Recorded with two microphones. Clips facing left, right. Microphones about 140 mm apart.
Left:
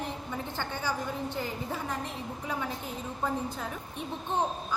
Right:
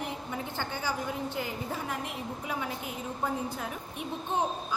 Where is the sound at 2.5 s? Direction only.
10° right (ahead or behind).